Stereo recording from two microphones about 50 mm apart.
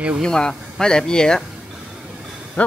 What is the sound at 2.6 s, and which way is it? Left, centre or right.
Speech, left.